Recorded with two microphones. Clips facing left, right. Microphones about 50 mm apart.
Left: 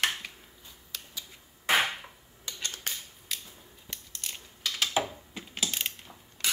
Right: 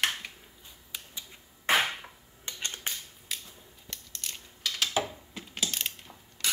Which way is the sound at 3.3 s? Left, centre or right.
Centre.